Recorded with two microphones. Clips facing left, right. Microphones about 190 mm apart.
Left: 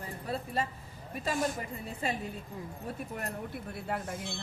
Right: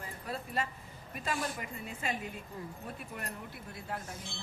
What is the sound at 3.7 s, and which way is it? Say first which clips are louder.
Speech: left 4 dB; 60° left (ahead or behind).